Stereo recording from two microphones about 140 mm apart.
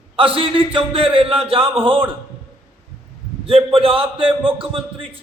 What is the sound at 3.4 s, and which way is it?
Speech, 40° right (ahead or behind).